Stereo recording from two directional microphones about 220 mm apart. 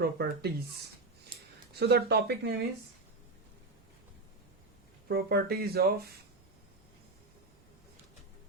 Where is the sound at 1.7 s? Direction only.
45° right (ahead or behind).